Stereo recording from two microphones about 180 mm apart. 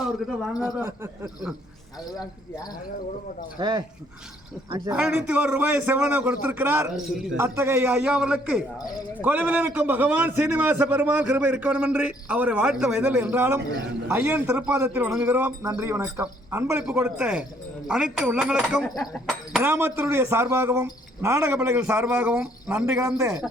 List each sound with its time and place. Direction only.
0.6 s a man's voice: 10° right (ahead or behind)
3.6 s speech: 25° right (ahead or behind)
4.9 s a man's voice: 10° right (ahead or behind)
19.6 s a man's voice: 10° right (ahead or behind)